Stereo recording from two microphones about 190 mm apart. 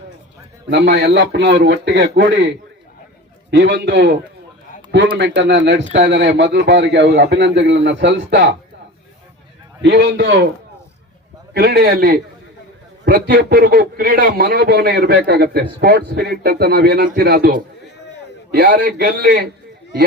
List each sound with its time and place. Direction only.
0.7 s a man's voice: 65° right (ahead or behind)
9.8 s a man's voice: 65° right (ahead or behind)
11.5 s a man's voice: 55° right (ahead or behind)